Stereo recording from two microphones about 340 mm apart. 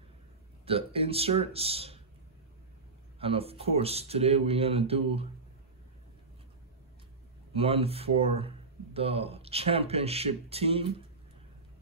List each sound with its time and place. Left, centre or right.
0.7 s speech: centre
3.2 s speech: centre
7.5 s speech: centre